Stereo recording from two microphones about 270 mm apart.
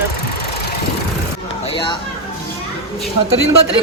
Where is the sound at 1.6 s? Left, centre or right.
Centre.